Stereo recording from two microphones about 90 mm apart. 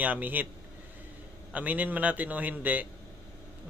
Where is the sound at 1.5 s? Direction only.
15° right (ahead or behind).